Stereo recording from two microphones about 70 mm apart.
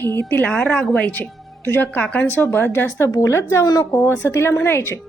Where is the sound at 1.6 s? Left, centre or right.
Left.